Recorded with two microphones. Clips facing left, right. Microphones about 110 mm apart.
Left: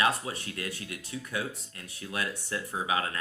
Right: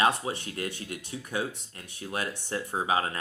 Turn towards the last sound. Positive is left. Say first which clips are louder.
# right 3 dB
turn(degrees=-30)  # may be behind; listen again after turning